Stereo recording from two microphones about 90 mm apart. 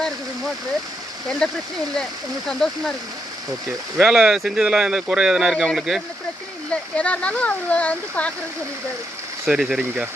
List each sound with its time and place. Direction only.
1.4 s speech: 10° left (ahead or behind)
3.9 s speech: 10° right (ahead or behind)
6.7 s speech: 15° left (ahead or behind)
9.5 s speech: 5° right (ahead or behind)